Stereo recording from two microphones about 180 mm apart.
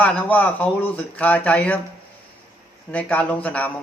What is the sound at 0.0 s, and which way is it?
A man's voice, 5° left (ahead or behind).